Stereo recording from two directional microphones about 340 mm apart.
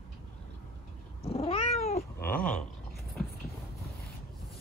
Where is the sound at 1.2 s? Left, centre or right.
Centre.